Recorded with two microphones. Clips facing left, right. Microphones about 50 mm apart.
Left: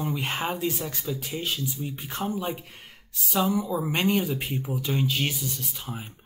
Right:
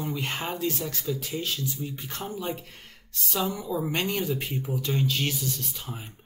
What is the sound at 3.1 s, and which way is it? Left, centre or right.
Speech, centre.